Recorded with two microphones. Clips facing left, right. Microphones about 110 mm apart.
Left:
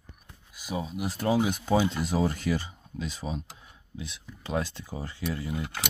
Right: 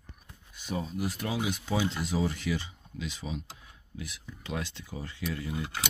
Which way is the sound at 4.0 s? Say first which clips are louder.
Left 1 dB; 30° left (ahead or behind).